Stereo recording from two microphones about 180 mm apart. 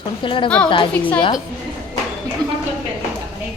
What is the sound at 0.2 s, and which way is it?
Speech, 30° left (ahead or behind).